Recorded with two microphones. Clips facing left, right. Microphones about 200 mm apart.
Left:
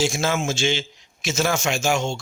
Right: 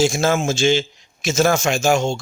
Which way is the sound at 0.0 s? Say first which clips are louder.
Right 5 dB; 45° right (ahead or behind).